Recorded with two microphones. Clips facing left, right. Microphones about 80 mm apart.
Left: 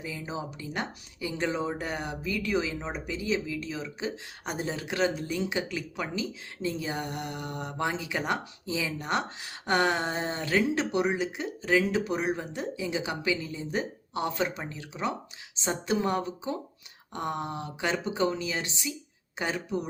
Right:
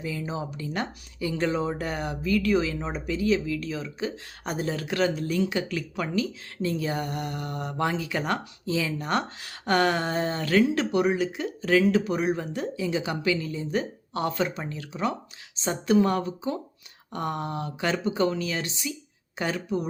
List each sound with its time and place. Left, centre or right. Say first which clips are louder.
0.0 s speech: right 4 dB; centre